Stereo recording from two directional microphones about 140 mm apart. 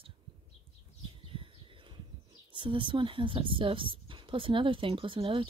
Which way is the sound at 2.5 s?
35° right (ahead or behind).